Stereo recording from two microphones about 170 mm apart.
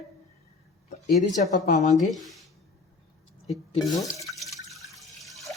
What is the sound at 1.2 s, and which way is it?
Speech, 50° left (ahead or behind).